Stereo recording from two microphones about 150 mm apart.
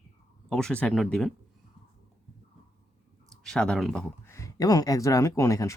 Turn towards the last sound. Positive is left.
turn(degrees=20)  # may be behind; listen again after turning